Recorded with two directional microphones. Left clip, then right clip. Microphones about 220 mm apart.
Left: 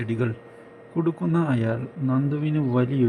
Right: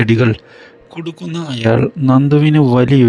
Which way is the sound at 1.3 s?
5° left (ahead or behind).